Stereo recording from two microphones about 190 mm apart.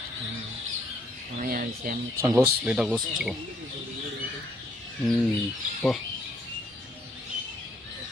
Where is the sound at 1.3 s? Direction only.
45° right (ahead or behind).